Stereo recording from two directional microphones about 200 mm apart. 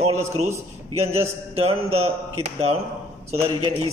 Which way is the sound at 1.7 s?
90° right.